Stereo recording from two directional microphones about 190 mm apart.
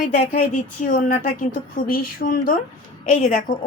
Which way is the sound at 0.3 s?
45° left (ahead or behind).